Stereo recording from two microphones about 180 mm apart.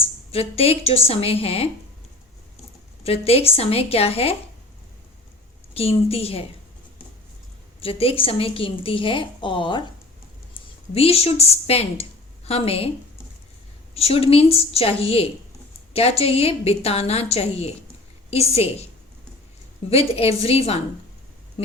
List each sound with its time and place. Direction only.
0.0 s a woman's voice: 35° left (ahead or behind)
3.0 s a woman's voice: 35° left (ahead or behind)
5.7 s a woman's voice: 35° left (ahead or behind)
7.8 s a woman's voice: 30° left (ahead or behind)
10.9 s a woman's voice: 35° left (ahead or behind)
13.9 s a woman's voice: 30° left (ahead or behind)
19.9 s a woman's voice: 35° left (ahead or behind)